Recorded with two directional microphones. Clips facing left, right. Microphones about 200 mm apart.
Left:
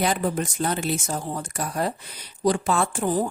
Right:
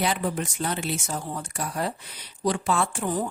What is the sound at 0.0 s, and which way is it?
Speech, 45° left (ahead or behind).